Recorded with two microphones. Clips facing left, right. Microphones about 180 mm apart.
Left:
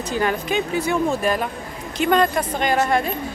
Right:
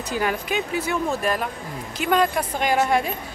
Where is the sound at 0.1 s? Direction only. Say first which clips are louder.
Left 3 dB; 5° right (ahead or behind).